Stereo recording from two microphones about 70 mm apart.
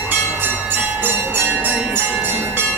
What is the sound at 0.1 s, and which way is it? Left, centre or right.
Bell, right.